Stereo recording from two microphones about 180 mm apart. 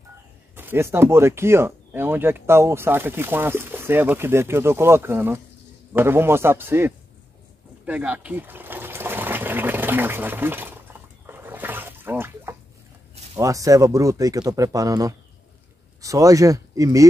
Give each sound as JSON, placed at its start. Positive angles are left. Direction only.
{"t": 0.6, "sound": "speech", "side_deg": -10}
{"t": 7.8, "sound": "water", "side_deg": -10}
{"t": 13.4, "sound": "speech", "side_deg": -20}